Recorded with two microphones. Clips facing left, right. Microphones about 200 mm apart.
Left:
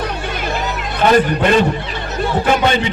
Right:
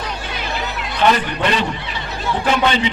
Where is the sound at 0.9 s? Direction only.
50° left (ahead or behind).